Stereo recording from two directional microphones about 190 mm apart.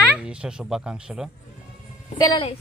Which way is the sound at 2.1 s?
20° left (ahead or behind).